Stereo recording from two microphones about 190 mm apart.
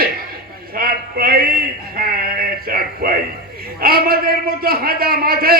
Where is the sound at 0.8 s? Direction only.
50° right (ahead or behind).